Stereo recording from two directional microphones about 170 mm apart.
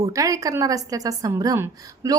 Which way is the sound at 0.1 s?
20° right (ahead or behind).